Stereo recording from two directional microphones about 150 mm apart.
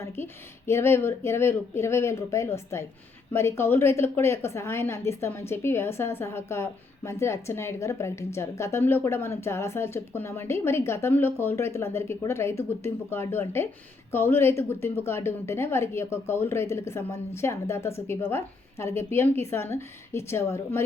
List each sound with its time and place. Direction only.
0.7 s a woman's voice: 15° left (ahead or behind)